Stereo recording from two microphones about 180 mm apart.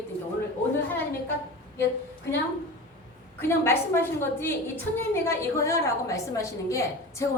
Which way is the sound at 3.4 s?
15° left (ahead or behind).